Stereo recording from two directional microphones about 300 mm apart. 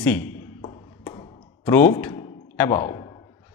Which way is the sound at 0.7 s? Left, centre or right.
Centre.